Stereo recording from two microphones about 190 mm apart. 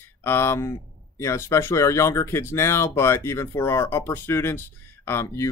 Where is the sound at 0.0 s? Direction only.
10° left (ahead or behind).